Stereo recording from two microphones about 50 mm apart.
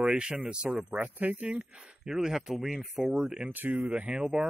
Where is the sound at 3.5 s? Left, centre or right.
Right.